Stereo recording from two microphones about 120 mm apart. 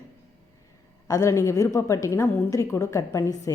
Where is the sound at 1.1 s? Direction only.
25° left (ahead or behind).